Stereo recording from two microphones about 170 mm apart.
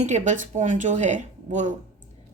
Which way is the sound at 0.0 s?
45° right (ahead or behind).